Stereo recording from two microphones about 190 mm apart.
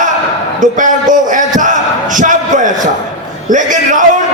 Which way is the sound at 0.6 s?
40° right (ahead or behind).